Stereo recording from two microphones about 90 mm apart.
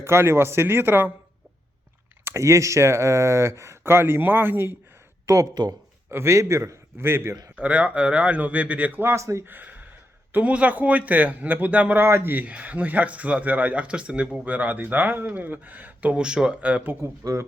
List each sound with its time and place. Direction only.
0.0 s speech: 30° right (ahead or behind)
2.2 s speech: 35° right (ahead or behind)
5.2 s speech: 35° right (ahead or behind)
7.5 s speech: 15° right (ahead or behind)
9.5 s gasp: 20° right (ahead or behind)
10.3 s speech: 15° right (ahead or behind)
12.0 s speech: 25° right (ahead or behind)
17.0 s speech: 35° right (ahead or behind)